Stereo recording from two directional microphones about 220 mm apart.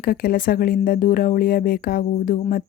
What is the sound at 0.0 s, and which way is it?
Speech, 45° left (ahead or behind).